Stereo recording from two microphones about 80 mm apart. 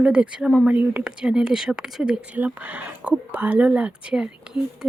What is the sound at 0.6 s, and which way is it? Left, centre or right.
Speech, centre.